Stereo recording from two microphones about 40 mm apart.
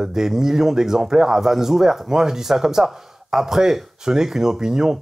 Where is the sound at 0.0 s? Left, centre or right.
Centre.